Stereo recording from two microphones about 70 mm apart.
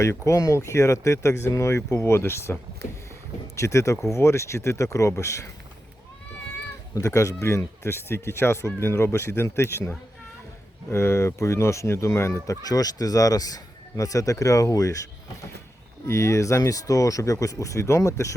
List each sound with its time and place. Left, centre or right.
0.0 s speech: left
6.9 s speech: left
12.6 s speech: left
16.0 s speech: left